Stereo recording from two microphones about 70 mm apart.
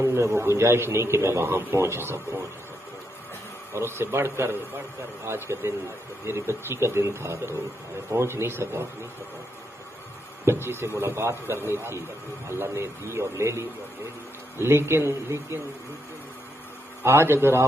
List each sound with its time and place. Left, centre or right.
0.0 s a man's voice: right
3.7 s a man's voice: right
10.4 s a man's voice: right
17.0 s a man's voice: right